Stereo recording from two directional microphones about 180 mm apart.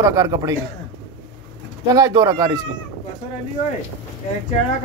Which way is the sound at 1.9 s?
20° right (ahead or behind).